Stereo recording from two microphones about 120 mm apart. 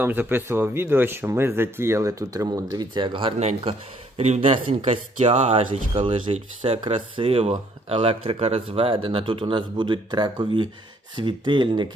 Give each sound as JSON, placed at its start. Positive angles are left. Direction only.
{"t": 0.0, "sound": "speech", "side_deg": -15}
{"t": 3.4, "sound": "speech", "side_deg": -55}
{"t": 4.9, "sound": "speech", "side_deg": -60}
{"t": 5.9, "sound": "speech", "side_deg": -50}